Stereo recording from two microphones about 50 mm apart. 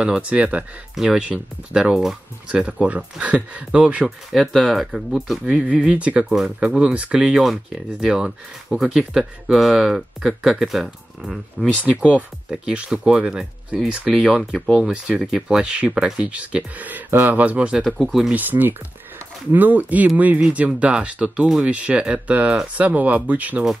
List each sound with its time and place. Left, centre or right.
0.0 s speech: right
0.9 s speech: centre
1.2 s speech: centre
4.3 s speech: centre
5.4 s speech: right; by 11.3 s centre
11.8 s speech: right
16.2 s speech: right
17.8 s speech: centre
18.3 s speech: right